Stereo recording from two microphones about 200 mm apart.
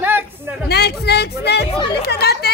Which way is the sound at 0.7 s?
55° left (ahead or behind).